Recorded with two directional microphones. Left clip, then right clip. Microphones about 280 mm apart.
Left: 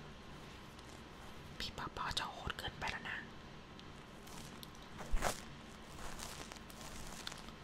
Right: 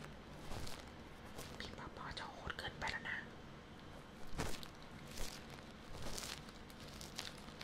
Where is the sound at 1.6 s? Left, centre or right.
Centre.